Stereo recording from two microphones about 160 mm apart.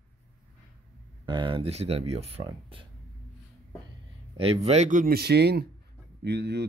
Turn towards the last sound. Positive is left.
turn(degrees=-90)